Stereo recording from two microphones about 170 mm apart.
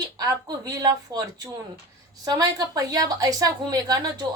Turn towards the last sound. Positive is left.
turn(degrees=-20)  # may be behind; listen again after turning